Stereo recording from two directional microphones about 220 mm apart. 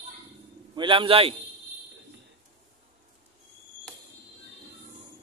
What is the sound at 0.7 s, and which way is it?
Speech, 25° right (ahead or behind).